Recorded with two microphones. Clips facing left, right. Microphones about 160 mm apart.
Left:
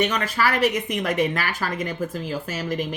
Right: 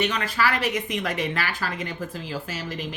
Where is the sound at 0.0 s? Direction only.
45° left (ahead or behind).